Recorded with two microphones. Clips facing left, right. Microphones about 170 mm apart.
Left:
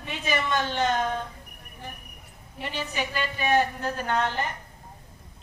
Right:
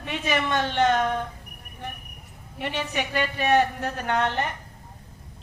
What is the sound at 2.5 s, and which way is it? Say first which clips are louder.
A woman's voice: right 3 dB; 65° right (ahead or behind).